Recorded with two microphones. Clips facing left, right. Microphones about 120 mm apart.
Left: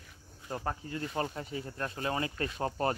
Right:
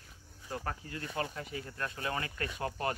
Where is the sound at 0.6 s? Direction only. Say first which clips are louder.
Left 6 dB; 25° left (ahead or behind).